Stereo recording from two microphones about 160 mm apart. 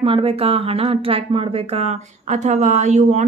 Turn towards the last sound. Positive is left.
turn(degrees=-50)  # may be behind; listen again after turning